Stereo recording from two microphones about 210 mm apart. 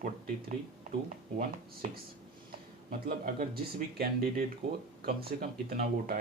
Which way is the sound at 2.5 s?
45° right (ahead or behind).